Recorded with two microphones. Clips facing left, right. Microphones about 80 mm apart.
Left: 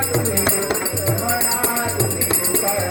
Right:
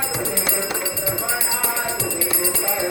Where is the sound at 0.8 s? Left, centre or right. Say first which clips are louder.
Left 3 dB; left.